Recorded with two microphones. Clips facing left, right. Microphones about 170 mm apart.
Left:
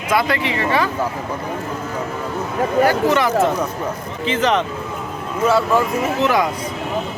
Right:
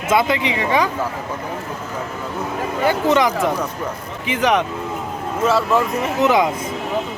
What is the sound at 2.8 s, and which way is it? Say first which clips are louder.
Speech: right 2 dB; 20° right (ahead or behind).